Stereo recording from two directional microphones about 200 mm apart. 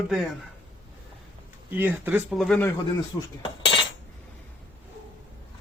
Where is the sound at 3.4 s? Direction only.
25° left (ahead or behind).